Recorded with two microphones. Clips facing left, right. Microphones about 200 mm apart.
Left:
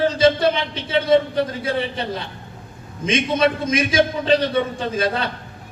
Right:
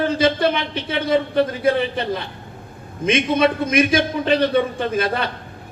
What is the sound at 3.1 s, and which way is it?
A man's voice, 60° right (ahead or behind).